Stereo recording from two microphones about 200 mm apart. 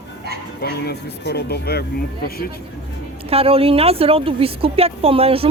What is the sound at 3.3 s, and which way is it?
Speech, 30° right (ahead or behind).